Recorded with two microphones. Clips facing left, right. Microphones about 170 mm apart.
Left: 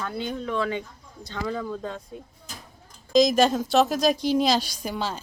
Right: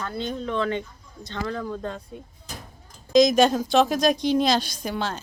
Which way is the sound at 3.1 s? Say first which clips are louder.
Right 2 dB; centre (ahead or behind).